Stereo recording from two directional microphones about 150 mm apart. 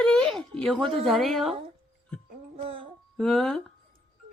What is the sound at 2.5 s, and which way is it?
Child singing, 40° right (ahead or behind).